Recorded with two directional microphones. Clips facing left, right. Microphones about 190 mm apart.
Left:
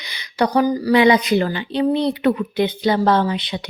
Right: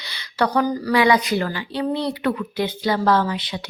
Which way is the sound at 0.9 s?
20° left (ahead or behind).